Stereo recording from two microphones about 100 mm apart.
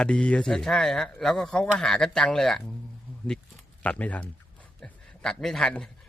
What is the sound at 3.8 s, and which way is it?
A man's voice, 15° left (ahead or behind).